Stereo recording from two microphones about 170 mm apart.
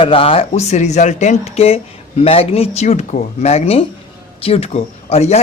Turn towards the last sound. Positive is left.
turn(degrees=40)  # may be behind; listen again after turning